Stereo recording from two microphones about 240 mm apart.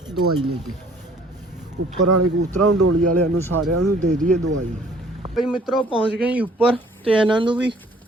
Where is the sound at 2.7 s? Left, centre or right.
Right.